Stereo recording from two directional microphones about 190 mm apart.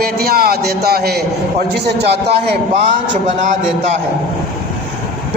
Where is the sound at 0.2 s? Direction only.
55° right (ahead or behind).